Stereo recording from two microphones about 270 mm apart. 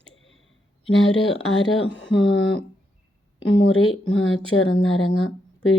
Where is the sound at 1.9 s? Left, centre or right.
Left.